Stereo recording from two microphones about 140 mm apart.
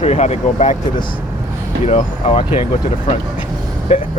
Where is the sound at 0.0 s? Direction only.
50° left (ahead or behind).